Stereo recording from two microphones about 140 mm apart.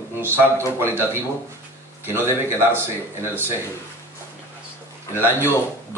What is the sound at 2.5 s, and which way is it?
Speech, 15° right (ahead or behind).